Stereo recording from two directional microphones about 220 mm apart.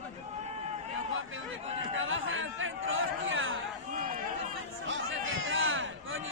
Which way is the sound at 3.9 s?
35° right (ahead or behind).